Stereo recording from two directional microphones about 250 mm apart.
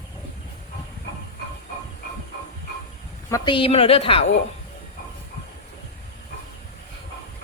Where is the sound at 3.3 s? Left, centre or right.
Centre.